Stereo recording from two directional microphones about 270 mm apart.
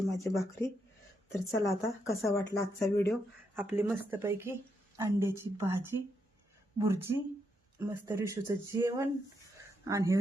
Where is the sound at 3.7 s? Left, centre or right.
Centre.